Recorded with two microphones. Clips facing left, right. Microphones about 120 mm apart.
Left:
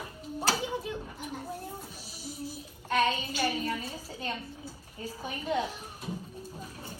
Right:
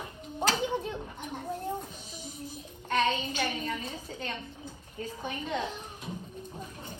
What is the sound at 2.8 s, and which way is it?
Child singing, 10° left (ahead or behind).